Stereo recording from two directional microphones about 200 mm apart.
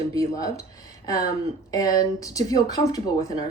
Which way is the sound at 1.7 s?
15° left (ahead or behind).